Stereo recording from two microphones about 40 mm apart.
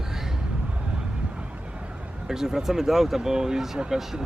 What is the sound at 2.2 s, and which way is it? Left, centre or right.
Speech, centre.